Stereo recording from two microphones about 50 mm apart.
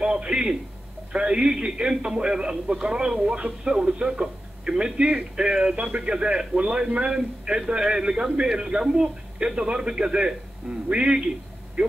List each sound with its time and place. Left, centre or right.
0.0 s a man's voice: centre